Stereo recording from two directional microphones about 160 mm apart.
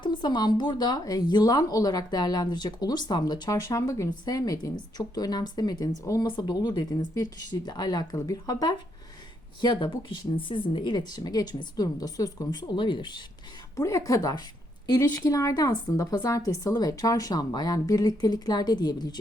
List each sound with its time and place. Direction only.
0.0 s speech: 30° left (ahead or behind)
13.7 s speech: 20° left (ahead or behind)